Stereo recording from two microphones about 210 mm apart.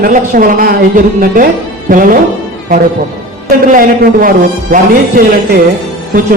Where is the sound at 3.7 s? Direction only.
40° right (ahead or behind).